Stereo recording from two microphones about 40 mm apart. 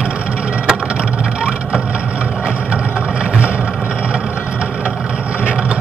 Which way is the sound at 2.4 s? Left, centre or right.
Right.